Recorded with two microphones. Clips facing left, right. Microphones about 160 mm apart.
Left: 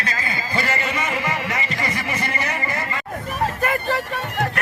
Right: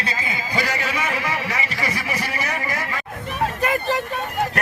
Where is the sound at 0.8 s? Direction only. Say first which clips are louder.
Even; 10° right (ahead or behind).